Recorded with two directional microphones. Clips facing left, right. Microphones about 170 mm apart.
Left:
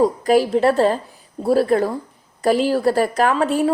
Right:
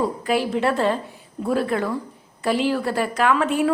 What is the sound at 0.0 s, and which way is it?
A woman's voice, 40° left (ahead or behind).